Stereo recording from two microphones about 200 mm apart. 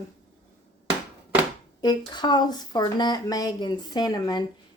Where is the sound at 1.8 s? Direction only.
20° left (ahead or behind).